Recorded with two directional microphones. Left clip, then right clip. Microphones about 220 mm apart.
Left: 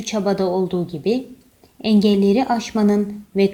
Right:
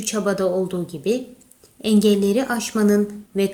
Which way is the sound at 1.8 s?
20° left (ahead or behind).